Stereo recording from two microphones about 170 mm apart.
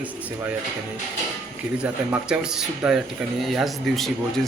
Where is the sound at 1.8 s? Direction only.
5° right (ahead or behind).